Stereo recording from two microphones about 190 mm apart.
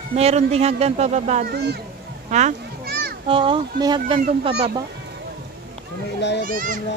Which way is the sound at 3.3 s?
25° right (ahead or behind).